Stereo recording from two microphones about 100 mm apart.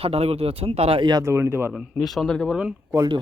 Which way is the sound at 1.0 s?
45° right (ahead or behind).